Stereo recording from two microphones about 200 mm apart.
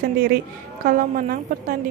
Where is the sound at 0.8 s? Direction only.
45° right (ahead or behind).